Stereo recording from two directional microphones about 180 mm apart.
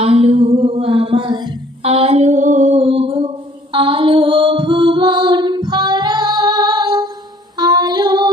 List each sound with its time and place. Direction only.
0.0 s mantra: 30° right (ahead or behind)
1.8 s a sound: 35° right (ahead or behind)
3.7 s music: 30° right (ahead or behind)
7.6 s female singing: 20° right (ahead or behind)